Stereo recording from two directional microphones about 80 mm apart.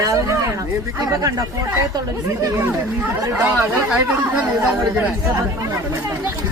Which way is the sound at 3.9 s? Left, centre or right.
Centre.